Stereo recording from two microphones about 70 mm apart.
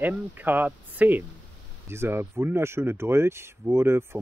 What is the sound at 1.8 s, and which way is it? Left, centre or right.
Speech, right.